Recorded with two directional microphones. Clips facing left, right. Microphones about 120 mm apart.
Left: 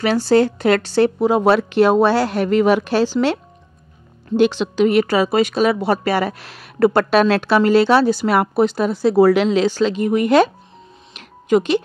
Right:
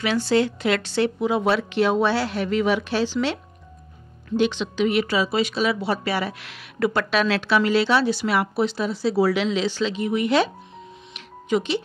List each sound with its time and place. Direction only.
0.0 s speech: 40° left (ahead or behind)
4.4 s speech: 40° left (ahead or behind)
11.1 s music: 50° left (ahead or behind)